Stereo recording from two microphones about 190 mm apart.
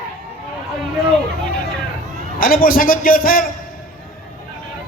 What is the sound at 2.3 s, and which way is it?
A man's voice, 50° left (ahead or behind).